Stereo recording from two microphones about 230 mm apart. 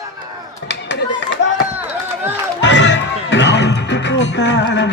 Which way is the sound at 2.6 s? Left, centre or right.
Left.